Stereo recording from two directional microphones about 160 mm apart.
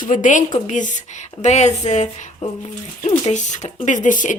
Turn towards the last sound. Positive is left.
turn(degrees=55)  # may be behind; listen again after turning